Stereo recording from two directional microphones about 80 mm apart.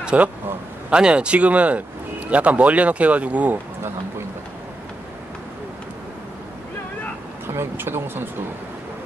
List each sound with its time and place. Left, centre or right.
0.0 s a man's voice: centre
7.4 s speech: right